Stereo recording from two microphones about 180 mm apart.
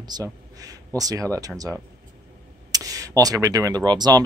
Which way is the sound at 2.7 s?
20° right (ahead or behind).